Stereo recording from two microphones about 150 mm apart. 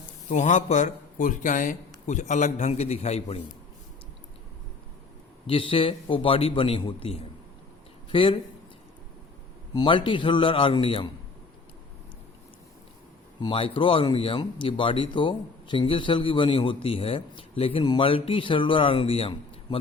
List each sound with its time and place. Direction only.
0.3 s a man's voice: 55° left (ahead or behind)
5.5 s speech: 35° left (ahead or behind)
9.7 s speech: 35° left (ahead or behind)
13.4 s speech: 35° left (ahead or behind)